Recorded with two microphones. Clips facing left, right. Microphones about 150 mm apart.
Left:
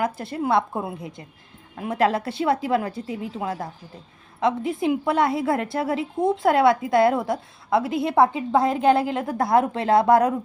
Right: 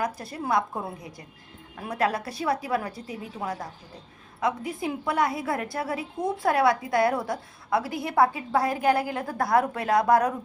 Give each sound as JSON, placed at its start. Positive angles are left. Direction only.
{"t": 0.0, "sound": "a woman's voice", "side_deg": 25}